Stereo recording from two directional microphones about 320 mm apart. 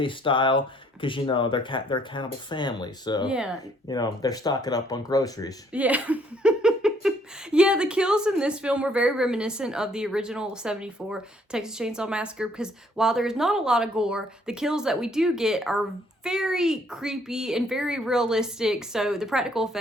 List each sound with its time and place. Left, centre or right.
0.0 s speech: centre
3.2 s a woman's voice: centre
3.8 s speech: centre
5.7 s a sound: centre
7.5 s a woman's voice: centre